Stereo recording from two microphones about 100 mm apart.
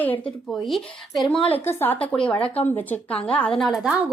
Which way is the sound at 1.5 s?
20° left (ahead or behind).